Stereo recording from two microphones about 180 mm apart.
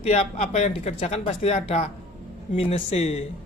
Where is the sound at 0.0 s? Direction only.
40° left (ahead or behind).